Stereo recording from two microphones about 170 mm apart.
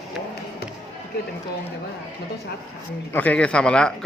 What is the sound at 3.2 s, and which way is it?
Speech, 10° left (ahead or behind).